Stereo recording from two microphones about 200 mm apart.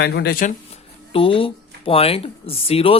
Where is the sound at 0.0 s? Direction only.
55° left (ahead or behind).